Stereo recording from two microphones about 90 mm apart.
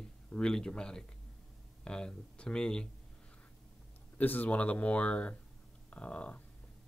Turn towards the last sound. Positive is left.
turn(degrees=15)  # may be behind; listen again after turning